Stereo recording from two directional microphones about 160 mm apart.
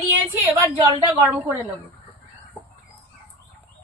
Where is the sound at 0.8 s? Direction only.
15° right (ahead or behind).